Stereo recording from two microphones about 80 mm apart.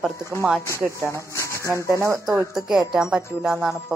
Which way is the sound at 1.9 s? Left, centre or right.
Right.